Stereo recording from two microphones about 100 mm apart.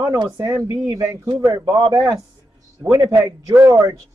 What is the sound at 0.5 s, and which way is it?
Speech, 30° right (ahead or behind).